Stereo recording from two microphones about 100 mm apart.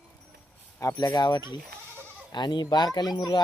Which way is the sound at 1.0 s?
45° left (ahead or behind).